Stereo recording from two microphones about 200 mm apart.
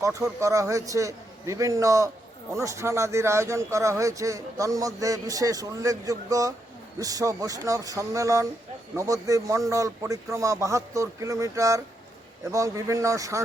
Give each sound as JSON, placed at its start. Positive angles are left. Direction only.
{"t": 0.0, "sound": "speech", "side_deg": -15}